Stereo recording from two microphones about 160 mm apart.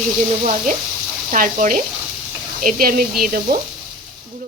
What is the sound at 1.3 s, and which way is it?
Speech, 55° right (ahead or behind).